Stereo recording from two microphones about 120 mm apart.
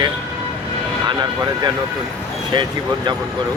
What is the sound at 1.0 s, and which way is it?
Speech, 35° right (ahead or behind).